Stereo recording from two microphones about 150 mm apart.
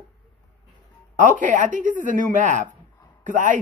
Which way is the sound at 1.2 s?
60° right (ahead or behind).